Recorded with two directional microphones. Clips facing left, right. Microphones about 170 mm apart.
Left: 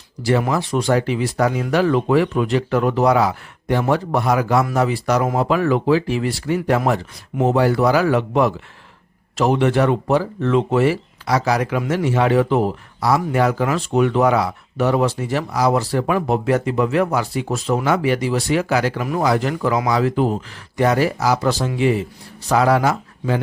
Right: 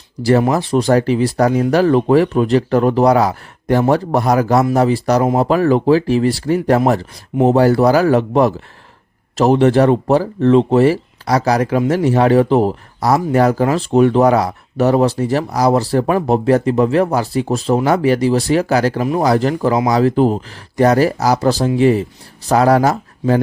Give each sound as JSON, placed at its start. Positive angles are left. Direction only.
{"t": 0.5, "sound": "speech", "side_deg": -35}